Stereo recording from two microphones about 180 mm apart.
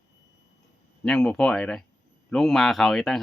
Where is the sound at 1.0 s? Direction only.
5° left (ahead or behind).